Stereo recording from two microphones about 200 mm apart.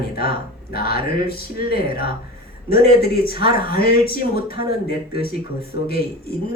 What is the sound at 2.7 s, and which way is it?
Speech, 50° left (ahead or behind).